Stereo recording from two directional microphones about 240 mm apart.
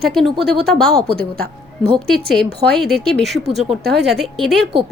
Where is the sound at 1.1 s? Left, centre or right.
Right.